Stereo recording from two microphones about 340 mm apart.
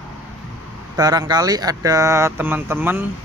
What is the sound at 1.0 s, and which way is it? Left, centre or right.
Speech, centre.